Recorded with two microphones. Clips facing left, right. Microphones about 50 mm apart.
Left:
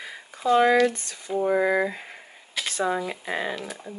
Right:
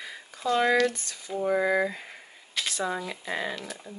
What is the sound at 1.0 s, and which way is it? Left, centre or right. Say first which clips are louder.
Speech: left 3 dB; left.